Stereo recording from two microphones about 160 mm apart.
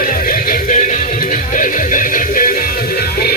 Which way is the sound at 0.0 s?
60° left (ahead or behind).